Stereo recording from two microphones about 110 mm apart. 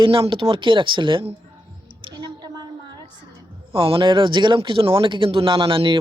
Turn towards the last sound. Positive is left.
turn(degrees=-55)  # may be behind; listen again after turning